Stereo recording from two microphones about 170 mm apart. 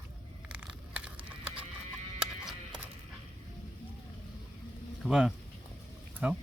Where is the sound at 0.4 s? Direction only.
5° right (ahead or behind).